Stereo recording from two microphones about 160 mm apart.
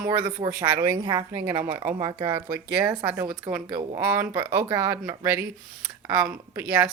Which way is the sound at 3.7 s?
35° right (ahead or behind).